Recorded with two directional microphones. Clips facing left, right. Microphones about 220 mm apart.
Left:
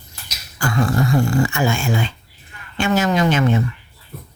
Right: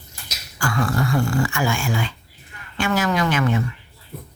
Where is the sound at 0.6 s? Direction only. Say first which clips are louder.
Left 3 dB; 20° left (ahead or behind).